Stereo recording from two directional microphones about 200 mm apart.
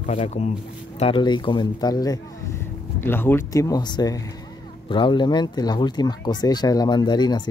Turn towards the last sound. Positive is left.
turn(degrees=20)  # may be behind; listen again after turning